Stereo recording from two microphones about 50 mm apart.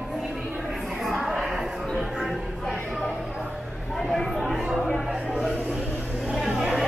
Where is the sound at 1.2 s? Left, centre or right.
Centre.